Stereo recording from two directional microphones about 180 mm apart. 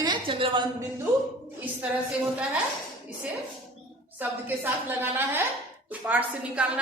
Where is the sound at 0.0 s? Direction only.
25° right (ahead or behind).